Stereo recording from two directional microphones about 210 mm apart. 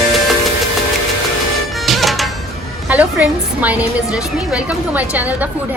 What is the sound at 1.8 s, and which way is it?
Music, centre (ahead or behind).